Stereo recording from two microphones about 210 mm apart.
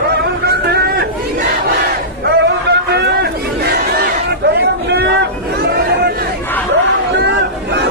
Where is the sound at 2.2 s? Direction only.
50° right (ahead or behind).